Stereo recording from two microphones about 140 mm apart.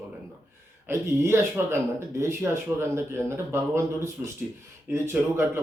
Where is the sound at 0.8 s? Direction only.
20° right (ahead or behind).